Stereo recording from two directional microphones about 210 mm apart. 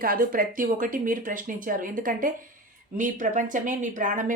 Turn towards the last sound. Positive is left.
turn(degrees=-40)  # may be behind; listen again after turning